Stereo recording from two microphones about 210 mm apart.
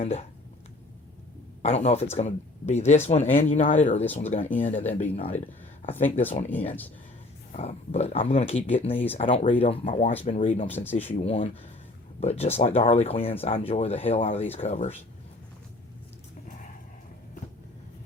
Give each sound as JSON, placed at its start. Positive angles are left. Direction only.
{"t": 0.0, "sound": "speech", "side_deg": 30}
{"t": 1.6, "sound": "speech", "side_deg": 30}
{"t": 4.0, "sound": "speech", "side_deg": 10}
{"t": 4.5, "sound": "speech", "side_deg": 35}
{"t": 6.7, "sound": "speech", "side_deg": 10}
{"t": 7.5, "sound": "speech", "side_deg": 30}
{"t": 10.7, "sound": "speech", "side_deg": 10}
{"t": 11.1, "sound": "speech", "side_deg": 30}